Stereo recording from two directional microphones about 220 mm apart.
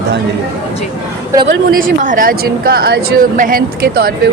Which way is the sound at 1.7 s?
40° right (ahead or behind).